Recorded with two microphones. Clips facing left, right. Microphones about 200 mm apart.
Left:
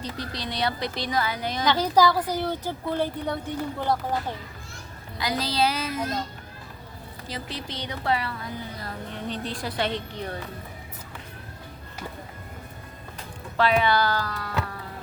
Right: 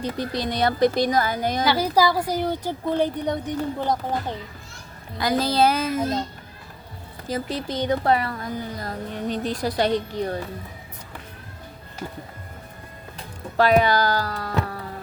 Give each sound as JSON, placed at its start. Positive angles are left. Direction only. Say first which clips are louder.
{"t": 0.0, "sound": "a woman's voice", "louder": "right 7 dB", "side_deg": -50}
{"t": 1.6, "sound": "a woman's voice", "louder": "even", "side_deg": -10}
{"t": 5.1, "sound": "a woman's voice", "louder": "right 6 dB", "side_deg": -50}
{"t": 7.3, "sound": "a woman's voice", "louder": "right 9 dB", "side_deg": -45}
{"t": 13.6, "sound": "speech", "louder": "right 4 dB", "side_deg": -40}